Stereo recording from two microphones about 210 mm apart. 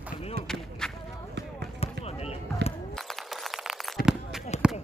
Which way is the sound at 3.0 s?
Centre (ahead or behind).